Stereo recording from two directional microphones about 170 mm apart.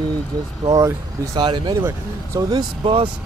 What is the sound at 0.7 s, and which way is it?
Speech, 20° right (ahead or behind).